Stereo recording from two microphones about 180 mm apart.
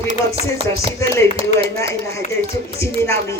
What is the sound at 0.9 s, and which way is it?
A man's voice, 15° left (ahead or behind).